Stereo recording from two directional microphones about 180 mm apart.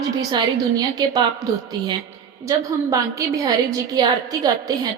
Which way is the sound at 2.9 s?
20° right (ahead or behind).